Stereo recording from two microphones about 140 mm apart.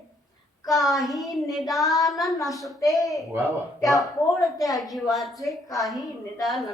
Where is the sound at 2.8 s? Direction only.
25° left (ahead or behind).